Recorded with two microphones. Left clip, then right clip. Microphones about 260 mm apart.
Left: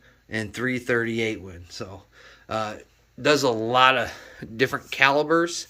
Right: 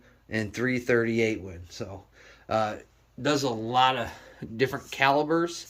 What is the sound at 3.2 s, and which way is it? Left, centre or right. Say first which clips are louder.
Speech: left 6 dB; centre.